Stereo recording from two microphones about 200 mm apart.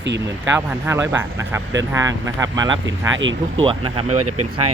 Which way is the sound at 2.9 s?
70° right (ahead or behind).